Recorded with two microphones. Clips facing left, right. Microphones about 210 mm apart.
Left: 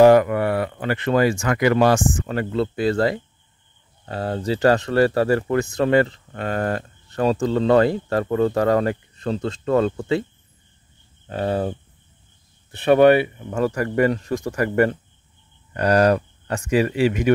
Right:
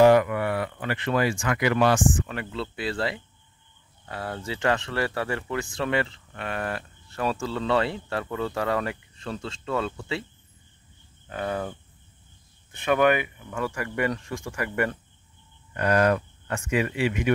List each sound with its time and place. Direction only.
0.0 s speech: 40° left (ahead or behind)
4.0 s speech: 25° left (ahead or behind); by 10.2 s 45° left (ahead or behind)
11.2 s speech: 30° left (ahead or behind)
12.7 s speech: 35° left (ahead or behind)